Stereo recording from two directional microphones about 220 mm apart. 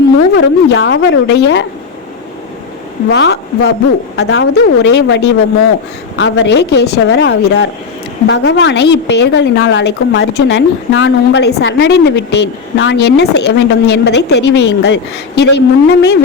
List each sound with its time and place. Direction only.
0.3 s a woman's voice: 55° left (ahead or behind)
3.1 s a woman's voice: 50° left (ahead or behind)